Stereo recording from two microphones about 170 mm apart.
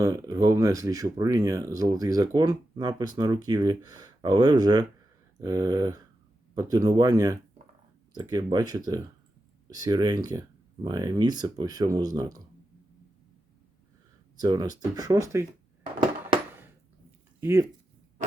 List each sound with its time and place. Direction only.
0.0 s speech: 20° right (ahead or behind)
14.3 s speech: 25° right (ahead or behind)
17.4 s speech: 15° right (ahead or behind)